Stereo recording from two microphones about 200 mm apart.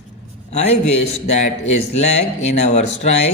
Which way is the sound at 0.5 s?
35° left (ahead or behind).